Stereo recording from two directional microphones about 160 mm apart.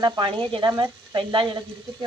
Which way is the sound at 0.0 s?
30° right (ahead or behind).